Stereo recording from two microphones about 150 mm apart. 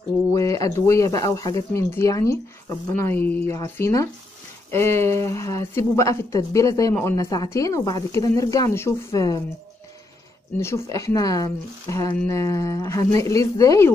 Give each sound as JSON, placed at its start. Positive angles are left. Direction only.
{"t": 0.3, "sound": "speech", "side_deg": 20}
{"t": 10.6, "sound": "speech", "side_deg": 20}